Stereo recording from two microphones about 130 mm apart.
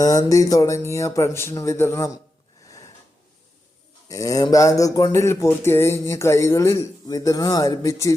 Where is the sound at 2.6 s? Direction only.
25° left (ahead or behind).